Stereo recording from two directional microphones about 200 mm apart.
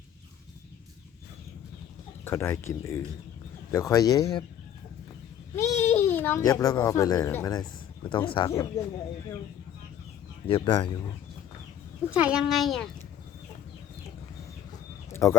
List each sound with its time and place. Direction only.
2.2 s speech: 10° left (ahead or behind)
5.5 s speech: 15° left (ahead or behind)
8.1 s speech: 25° left (ahead or behind)
10.4 s speech: 25° left (ahead or behind)
12.2 s speech: 5° right (ahead or behind)
15.1 s a sound: 15° left (ahead or behind)